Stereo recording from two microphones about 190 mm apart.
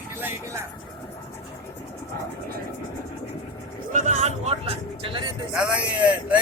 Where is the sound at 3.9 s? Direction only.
35° right (ahead or behind).